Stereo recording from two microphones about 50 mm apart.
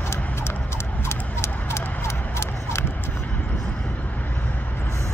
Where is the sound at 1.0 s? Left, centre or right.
Left.